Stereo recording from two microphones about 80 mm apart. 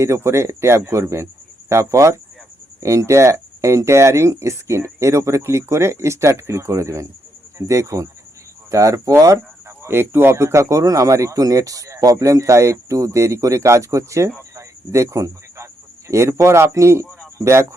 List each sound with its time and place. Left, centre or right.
0.0 s speech: right